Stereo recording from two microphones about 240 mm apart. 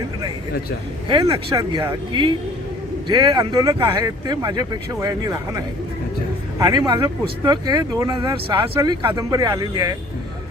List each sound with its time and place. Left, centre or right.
1.0 s speech: right